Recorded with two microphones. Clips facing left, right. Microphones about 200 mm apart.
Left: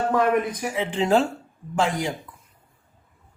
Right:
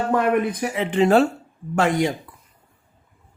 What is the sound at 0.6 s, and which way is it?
Speech, 65° right (ahead or behind).